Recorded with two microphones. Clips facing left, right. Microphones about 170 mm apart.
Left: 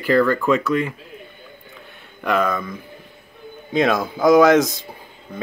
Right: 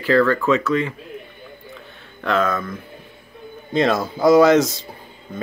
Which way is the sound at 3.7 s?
Centre (ahead or behind).